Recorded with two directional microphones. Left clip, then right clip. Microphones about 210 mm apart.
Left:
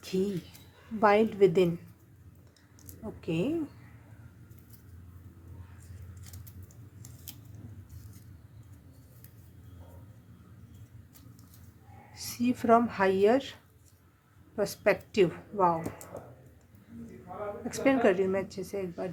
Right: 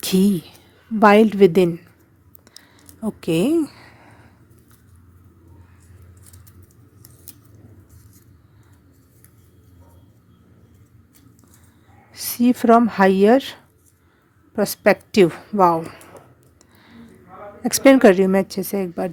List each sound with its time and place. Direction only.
0.0 s speech: 50° right (ahead or behind)
2.5 s a sound: 55° right (ahead or behind)
12.1 s speech: 45° right (ahead or behind)
17.6 s speech: 55° right (ahead or behind)